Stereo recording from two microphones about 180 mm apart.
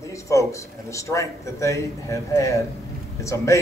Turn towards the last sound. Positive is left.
turn(degrees=15)  # may be behind; listen again after turning